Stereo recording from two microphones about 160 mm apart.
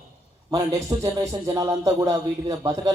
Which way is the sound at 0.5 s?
20° right (ahead or behind).